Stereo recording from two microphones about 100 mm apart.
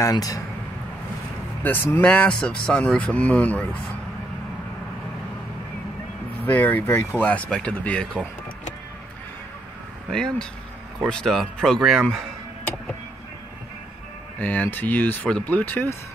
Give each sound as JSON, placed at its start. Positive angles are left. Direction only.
{"t": 0.0, "sound": "speech", "side_deg": 35}
{"t": 1.6, "sound": "speech", "side_deg": 20}
{"t": 6.4, "sound": "speech", "side_deg": 20}
{"t": 10.0, "sound": "speech", "side_deg": 5}
{"t": 14.4, "sound": "speech", "side_deg": 20}